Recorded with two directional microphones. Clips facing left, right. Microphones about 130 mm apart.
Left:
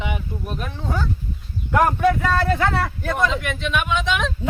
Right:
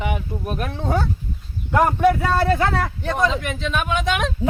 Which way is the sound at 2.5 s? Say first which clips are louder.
Right 1 dB; 25° right (ahead or behind).